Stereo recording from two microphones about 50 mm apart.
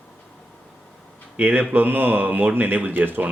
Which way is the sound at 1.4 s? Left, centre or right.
Right.